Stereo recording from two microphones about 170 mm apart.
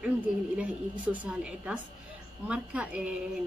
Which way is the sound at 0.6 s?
10° right (ahead or behind).